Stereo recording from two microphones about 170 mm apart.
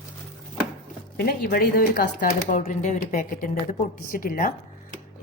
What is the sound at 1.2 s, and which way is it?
Speech, 70° left (ahead or behind).